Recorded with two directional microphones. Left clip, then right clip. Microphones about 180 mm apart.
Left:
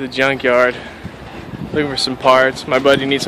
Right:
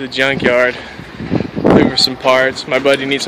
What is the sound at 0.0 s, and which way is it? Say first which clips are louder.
Speech: right 2 dB; centre (ahead or behind).